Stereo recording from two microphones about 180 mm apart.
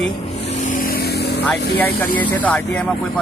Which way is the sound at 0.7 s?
50° left (ahead or behind).